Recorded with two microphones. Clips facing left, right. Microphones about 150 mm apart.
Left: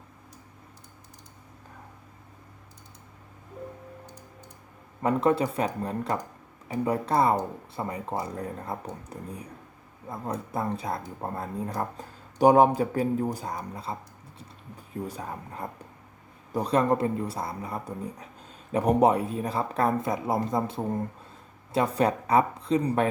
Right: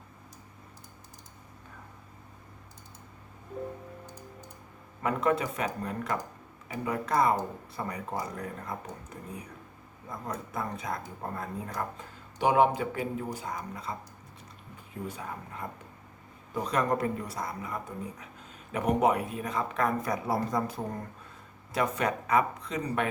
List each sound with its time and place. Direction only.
5.0 s speech: 30° left (ahead or behind)
15.0 s speech: 35° left (ahead or behind)